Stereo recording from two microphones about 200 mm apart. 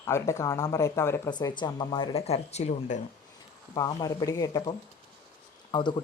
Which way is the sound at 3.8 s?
20° left (ahead or behind).